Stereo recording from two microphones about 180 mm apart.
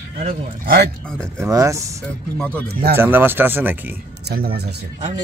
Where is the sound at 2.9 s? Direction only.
10° right (ahead or behind).